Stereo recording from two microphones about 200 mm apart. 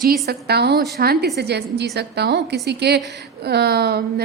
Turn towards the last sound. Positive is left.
turn(degrees=-50)  # may be behind; listen again after turning